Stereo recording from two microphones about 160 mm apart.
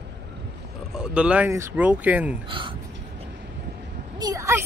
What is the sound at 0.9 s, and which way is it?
Speech, 5° right (ahead or behind).